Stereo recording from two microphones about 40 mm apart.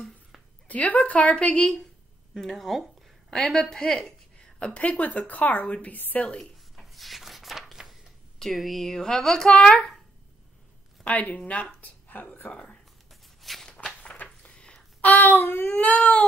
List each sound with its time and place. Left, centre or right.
0.7 s a woman's voice: left
2.3 s a child's voice: centre
4.6 s a woman's voice: left
6.8 s a sound: centre
8.5 s a child's voice: centre; by 9.9 s left
11.1 s a woman's voice: left
11.8 s a sound: left
13.1 s walk: centre
14.0 s a sound: left
14.5 s a sound: left
15.0 s child singing: left
15.8 s a woman's voice: left